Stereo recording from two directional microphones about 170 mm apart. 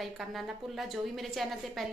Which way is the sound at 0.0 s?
Centre (ahead or behind).